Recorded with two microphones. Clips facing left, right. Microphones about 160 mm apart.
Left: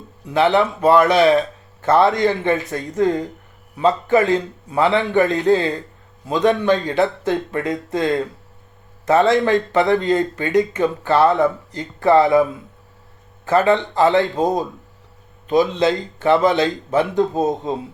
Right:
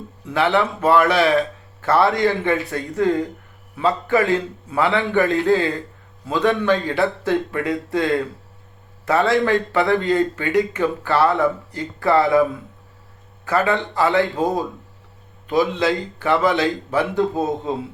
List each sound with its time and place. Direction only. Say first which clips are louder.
0.3 s speech: left 3 dB; 20° left (ahead or behind)